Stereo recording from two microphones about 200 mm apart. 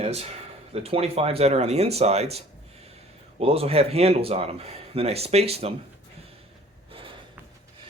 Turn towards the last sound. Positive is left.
turn(degrees=-25)  # may be behind; listen again after turning